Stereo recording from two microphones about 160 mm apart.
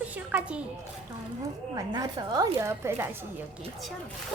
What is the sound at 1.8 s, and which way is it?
A woman's voice, 25° right (ahead or behind).